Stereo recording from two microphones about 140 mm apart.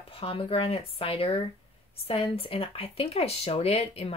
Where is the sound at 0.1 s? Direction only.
45° left (ahead or behind).